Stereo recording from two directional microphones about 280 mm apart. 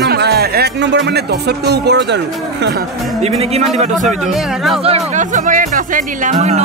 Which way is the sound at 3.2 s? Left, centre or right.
Right.